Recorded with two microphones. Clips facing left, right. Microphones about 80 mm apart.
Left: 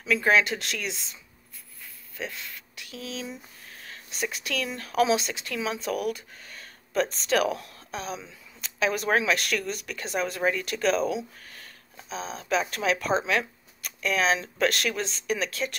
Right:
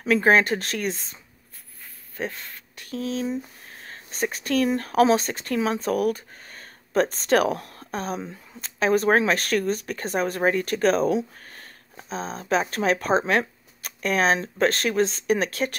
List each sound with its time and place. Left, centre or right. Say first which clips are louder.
0.0 s speech: right 4 dB; right
2.1 s speech: right 5 dB; right